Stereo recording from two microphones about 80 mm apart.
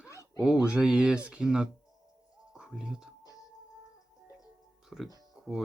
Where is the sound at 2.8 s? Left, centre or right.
Centre.